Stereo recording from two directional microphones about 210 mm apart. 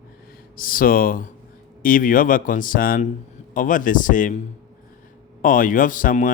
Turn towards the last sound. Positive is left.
turn(degrees=40)  # may be behind; listen again after turning